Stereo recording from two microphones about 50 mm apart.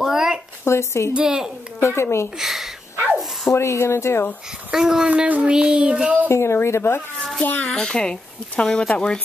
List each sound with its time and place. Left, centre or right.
0.0 s a sound: centre
0.7 s speech: left
1.1 s a woman's voice: centre
1.8 s speech: left
2.3 s speech: centre
3.5 s speech: left
4.7 s a woman's voice: centre
5.1 s child singing: right
6.2 s speech: left
7.4 s a child's voice: left
7.7 s speech: centre